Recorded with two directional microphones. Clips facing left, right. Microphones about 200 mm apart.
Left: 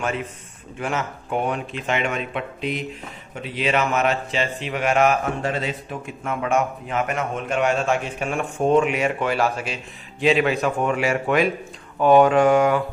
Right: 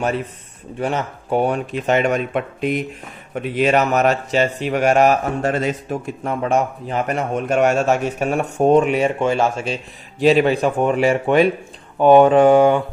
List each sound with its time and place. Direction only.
0.0 s speech: 35° right (ahead or behind)